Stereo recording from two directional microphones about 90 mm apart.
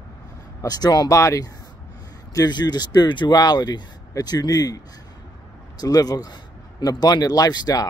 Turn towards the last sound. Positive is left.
turn(degrees=45)  # may be behind; listen again after turning